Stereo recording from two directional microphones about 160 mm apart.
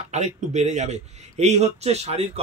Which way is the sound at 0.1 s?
45° right (ahead or behind).